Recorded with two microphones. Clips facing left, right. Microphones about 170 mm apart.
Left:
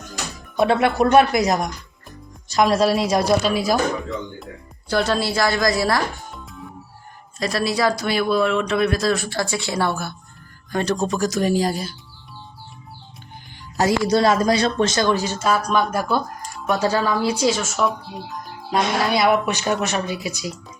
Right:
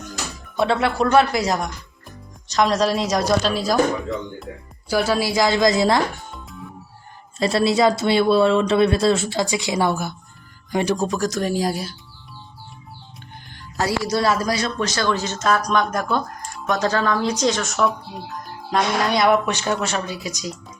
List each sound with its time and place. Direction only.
0.5 s speech: 15° left (ahead or behind)
4.9 s a woman's voice: 10° right (ahead or behind)
6.3 s music: centre (ahead or behind)
7.3 s speech: 25° right (ahead or behind); by 11.9 s centre (ahead or behind)
14.1 s speech: 25° left (ahead or behind)